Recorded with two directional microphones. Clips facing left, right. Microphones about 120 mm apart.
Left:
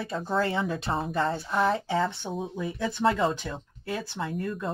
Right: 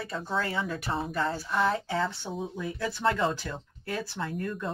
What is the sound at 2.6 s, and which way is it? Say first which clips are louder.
Speech: left 3 dB; 20° left (ahead or behind).